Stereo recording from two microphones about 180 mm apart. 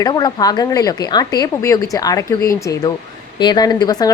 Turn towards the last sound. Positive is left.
turn(degrees=20)  # may be behind; listen again after turning